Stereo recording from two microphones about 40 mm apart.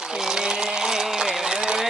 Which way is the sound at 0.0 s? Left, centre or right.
Centre.